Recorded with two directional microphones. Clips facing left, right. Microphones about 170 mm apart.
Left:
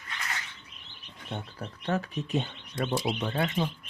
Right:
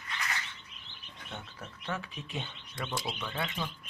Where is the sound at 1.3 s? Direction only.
35° left (ahead or behind).